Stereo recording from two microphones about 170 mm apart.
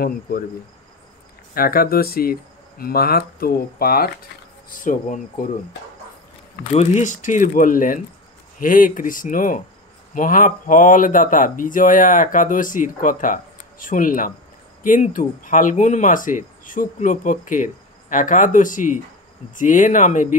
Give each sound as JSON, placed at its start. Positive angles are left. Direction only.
{"t": 1.5, "sound": "speech", "side_deg": 60}
{"t": 6.7, "sound": "speech", "side_deg": 40}